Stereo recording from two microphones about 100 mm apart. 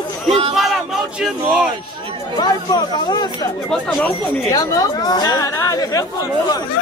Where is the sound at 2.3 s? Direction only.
45° left (ahead or behind).